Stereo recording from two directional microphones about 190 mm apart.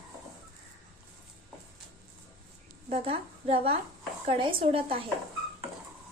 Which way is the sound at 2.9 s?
30° right (ahead or behind).